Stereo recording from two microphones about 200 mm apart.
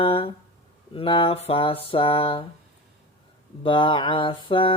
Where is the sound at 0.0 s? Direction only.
25° left (ahead or behind).